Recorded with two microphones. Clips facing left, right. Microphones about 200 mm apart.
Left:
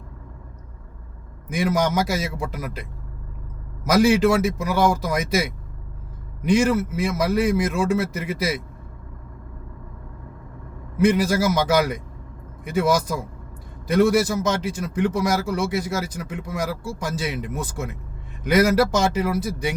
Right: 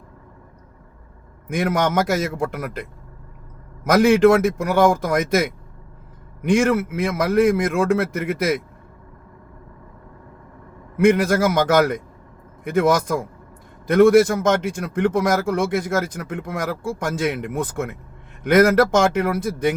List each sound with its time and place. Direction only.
1.5 s a man's voice: 55° right (ahead or behind)
4.1 s a man's voice: 55° right (ahead or behind)
6.4 s a man's voice: 55° right (ahead or behind)
10.9 s a man's voice: 55° right (ahead or behind)